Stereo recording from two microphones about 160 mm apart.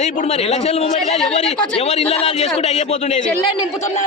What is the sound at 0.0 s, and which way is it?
A man's voice, 50° left (ahead or behind).